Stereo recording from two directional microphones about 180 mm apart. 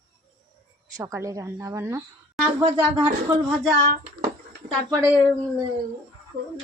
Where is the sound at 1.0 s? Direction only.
15° right (ahead or behind).